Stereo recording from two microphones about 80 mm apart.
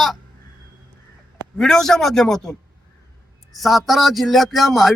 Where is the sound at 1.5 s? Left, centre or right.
Centre.